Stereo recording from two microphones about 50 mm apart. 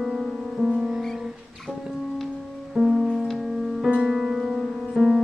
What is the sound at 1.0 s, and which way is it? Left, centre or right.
Music, centre.